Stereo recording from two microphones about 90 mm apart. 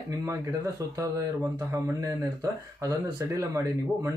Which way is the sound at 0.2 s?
40° right (ahead or behind).